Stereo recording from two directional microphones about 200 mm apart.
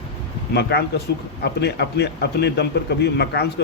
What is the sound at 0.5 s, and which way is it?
A man's voice, 55° left (ahead or behind).